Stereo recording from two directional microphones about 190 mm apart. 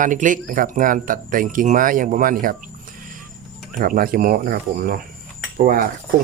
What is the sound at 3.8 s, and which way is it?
Speech, 50° right (ahead or behind).